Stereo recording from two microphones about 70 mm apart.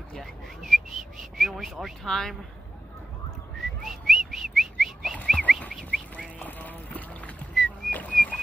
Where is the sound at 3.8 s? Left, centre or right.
Centre.